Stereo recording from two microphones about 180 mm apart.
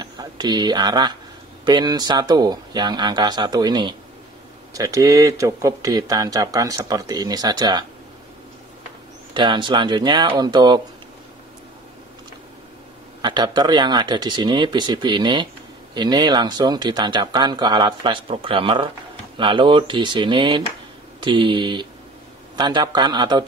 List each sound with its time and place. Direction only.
0.0 s speech: 25° right (ahead or behind)
9.3 s speech: 25° right (ahead or behind)
13.2 s speech: 25° right (ahead or behind)